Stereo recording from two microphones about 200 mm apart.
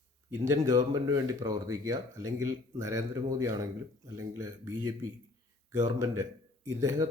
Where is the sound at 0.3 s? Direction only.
15° right (ahead or behind).